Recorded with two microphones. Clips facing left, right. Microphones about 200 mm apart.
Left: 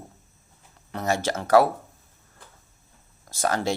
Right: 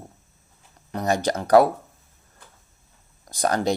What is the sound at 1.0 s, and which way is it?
Speech, 15° right (ahead or behind).